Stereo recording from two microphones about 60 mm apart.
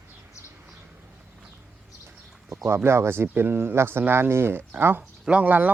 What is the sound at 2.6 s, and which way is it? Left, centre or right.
Speech, right.